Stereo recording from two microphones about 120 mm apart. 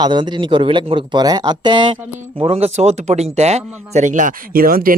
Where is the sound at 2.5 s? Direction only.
60° right (ahead or behind); by 4.4 s 90° right.